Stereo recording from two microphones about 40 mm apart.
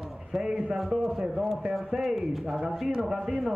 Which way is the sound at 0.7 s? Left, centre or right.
Centre.